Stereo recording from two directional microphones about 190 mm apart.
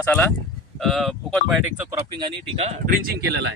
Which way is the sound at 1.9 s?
25° right (ahead or behind).